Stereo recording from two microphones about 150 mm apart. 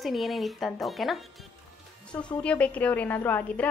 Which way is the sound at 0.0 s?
Centre (ahead or behind).